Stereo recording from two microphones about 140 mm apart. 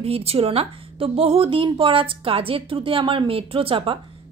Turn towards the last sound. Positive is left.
turn(degrees=-40)  # may be behind; listen again after turning